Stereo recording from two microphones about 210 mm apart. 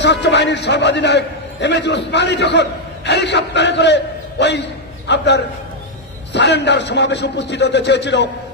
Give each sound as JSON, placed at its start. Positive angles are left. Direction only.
{"t": 0.0, "sound": "a man's voice", "side_deg": 55}